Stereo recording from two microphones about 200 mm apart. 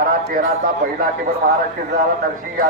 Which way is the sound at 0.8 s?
45° right (ahead or behind).